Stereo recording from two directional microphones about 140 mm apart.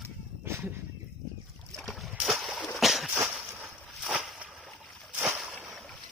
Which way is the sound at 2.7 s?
Centre (ahead or behind).